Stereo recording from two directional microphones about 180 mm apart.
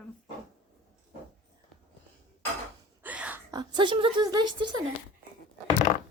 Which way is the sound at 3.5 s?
25° right (ahead or behind).